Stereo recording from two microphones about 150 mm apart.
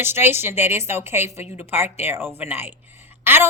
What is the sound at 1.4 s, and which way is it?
Speech, 45° left (ahead or behind).